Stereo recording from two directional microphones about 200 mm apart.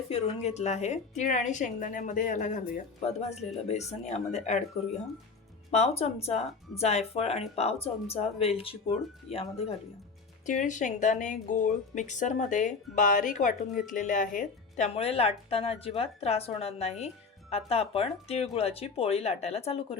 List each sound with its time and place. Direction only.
0.1 s speech: 35° left (ahead or behind)
6.0 s speech: 30° left (ahead or behind)